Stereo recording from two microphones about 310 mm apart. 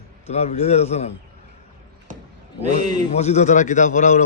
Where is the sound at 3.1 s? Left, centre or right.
Left.